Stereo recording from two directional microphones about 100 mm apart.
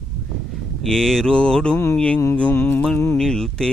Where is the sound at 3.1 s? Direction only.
5° left (ahead or behind).